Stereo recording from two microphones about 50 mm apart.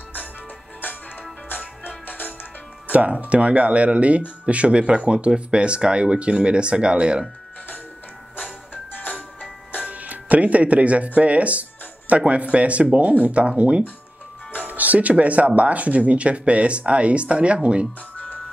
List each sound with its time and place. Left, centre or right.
1.9 s music: left
2.9 s speech: right
8.9 s music: left
9.8 s music: right
11.1 s speech: right
18.1 s music: left